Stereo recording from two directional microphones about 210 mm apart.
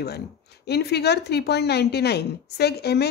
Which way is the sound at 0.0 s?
50° left (ahead or behind).